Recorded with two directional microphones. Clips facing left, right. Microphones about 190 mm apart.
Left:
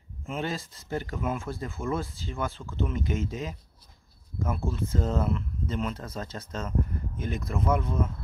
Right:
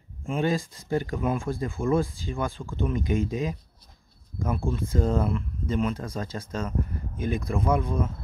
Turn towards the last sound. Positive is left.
turn(degrees=-15)  # may be behind; listen again after turning